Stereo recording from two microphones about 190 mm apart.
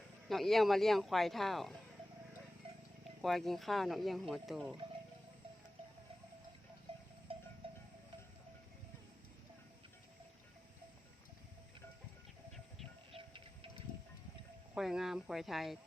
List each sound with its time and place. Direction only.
0.3 s speech: centre (ahead or behind)
3.2 s speech: centre (ahead or behind)
7.3 s cowbell: 30° right (ahead or behind)
13.1 s a sound: 30° right (ahead or behind)
14.8 s speech: centre (ahead or behind)